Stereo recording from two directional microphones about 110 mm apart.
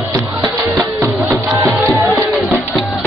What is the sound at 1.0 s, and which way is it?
Music, 25° right (ahead or behind).